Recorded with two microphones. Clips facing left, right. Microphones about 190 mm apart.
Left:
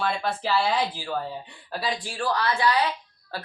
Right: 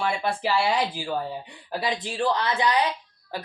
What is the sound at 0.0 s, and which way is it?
Speech, 10° right (ahead or behind).